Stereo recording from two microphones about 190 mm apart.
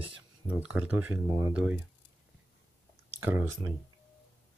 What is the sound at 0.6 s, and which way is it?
Speech, 5° right (ahead or behind).